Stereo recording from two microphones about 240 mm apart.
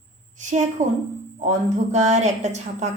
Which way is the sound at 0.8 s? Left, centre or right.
Right.